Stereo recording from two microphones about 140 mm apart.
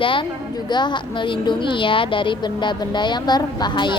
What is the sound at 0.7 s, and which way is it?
A woman's voice, 30° left (ahead or behind).